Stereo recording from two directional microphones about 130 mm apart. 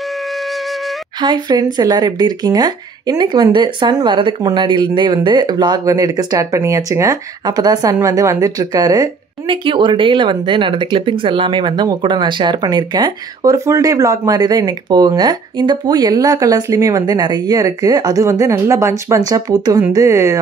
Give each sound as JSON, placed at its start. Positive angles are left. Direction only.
{"t": 1.2, "sound": "speech", "side_deg": -35}
{"t": 9.5, "sound": "speech", "side_deg": -40}